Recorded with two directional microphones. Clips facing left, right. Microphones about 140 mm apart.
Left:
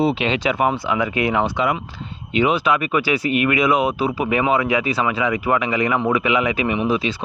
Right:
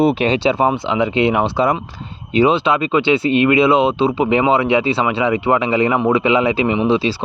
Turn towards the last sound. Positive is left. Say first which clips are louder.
# right 4 dB
turn(degrees=-30)  # may be behind; listen again after turning